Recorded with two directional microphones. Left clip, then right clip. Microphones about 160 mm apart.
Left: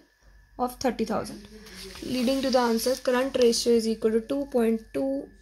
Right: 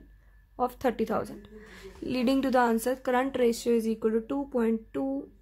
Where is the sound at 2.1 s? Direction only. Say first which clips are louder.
Left 1 dB; 20° right (ahead or behind).